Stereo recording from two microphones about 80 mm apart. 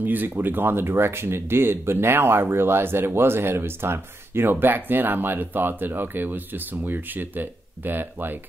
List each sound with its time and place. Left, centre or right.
0.0 s speech: right